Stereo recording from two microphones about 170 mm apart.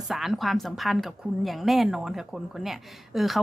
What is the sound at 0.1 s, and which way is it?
Speech, centre (ahead or behind).